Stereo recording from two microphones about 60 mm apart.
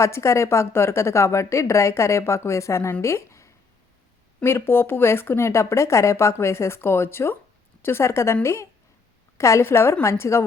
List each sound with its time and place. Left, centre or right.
0.0 s speech: left
4.4 s speech: left